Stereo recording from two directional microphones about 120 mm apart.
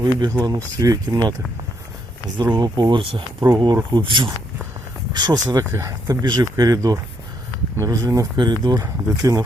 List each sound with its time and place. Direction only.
0.0 s speech: 35° right (ahead or behind)
2.4 s speech: 35° right (ahead or behind)
3.4 s speech: 30° right (ahead or behind)
3.9 s speech: 45° right (ahead or behind)